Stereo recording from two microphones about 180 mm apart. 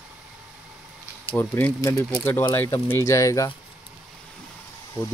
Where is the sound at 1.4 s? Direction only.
10° left (ahead or behind).